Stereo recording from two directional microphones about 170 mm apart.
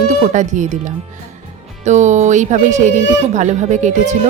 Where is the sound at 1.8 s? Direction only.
45° right (ahead or behind).